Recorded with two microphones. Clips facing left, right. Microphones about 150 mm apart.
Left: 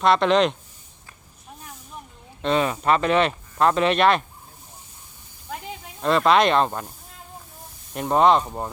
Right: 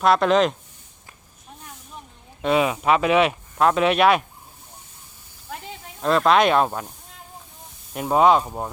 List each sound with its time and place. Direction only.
0.0 s speech: centre (ahead or behind)
2.4 s speech: 5° right (ahead or behind)
6.0 s speech: centre (ahead or behind)
7.9 s speech: 5° right (ahead or behind)